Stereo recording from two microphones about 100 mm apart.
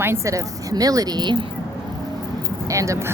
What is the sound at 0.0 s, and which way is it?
A woman's voice, 30° right (ahead or behind).